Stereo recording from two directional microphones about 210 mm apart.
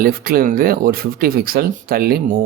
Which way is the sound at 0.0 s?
45° right (ahead or behind).